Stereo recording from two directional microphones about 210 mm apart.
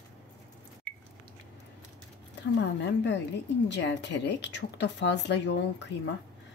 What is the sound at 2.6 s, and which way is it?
Speech, 55° left (ahead or behind).